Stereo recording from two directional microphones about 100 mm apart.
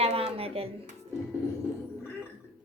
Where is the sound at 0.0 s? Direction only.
85° right.